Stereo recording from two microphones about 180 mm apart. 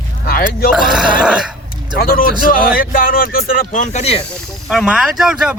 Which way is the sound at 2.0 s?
55° left (ahead or behind).